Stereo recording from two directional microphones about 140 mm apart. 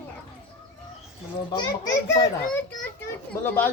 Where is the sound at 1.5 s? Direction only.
30° left (ahead or behind).